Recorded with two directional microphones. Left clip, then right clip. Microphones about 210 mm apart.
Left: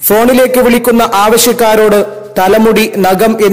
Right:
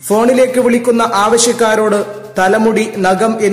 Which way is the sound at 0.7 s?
40° left (ahead or behind).